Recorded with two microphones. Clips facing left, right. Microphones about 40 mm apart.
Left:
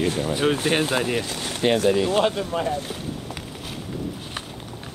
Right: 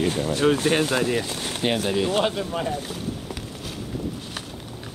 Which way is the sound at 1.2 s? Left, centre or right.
Centre.